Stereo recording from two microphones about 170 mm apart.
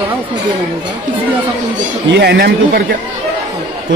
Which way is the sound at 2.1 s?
75° right (ahead or behind).